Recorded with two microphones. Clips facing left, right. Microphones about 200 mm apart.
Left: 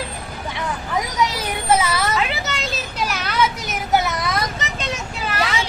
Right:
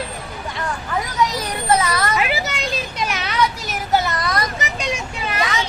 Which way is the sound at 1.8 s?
5° left (ahead or behind).